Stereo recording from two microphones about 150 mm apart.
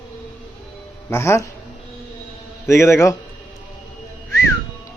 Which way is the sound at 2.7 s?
20° left (ahead or behind).